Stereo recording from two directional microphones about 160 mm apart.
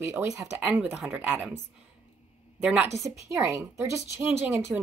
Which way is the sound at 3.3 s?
15° right (ahead or behind).